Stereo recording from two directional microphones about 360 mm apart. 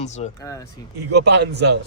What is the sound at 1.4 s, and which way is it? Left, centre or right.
Speech, right.